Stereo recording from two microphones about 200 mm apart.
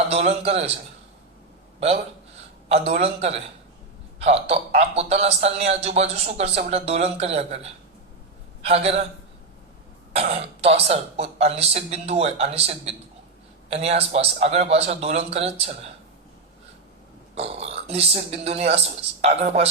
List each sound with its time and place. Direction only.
0.1 s a man's voice: 30° right (ahead or behind)
2.6 s a man's voice: 30° right (ahead or behind)
10.1 s a man's voice: 30° right (ahead or behind)
17.3 s a man's voice: 30° right (ahead or behind)